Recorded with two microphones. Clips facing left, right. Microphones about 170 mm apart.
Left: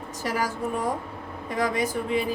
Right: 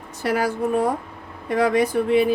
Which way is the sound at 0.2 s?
65° right (ahead or behind).